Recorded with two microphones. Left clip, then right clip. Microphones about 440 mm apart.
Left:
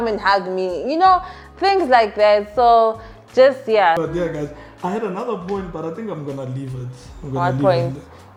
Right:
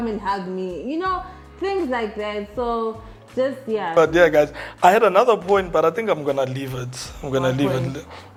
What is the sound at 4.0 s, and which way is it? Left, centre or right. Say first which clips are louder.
A man's voice: right 8 dB; right.